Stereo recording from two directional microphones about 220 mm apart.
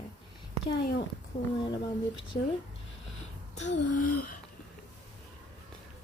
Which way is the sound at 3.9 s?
40° left (ahead or behind).